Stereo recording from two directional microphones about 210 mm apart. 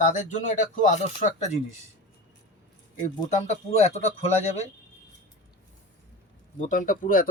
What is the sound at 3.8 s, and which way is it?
Speech, 30° left (ahead or behind).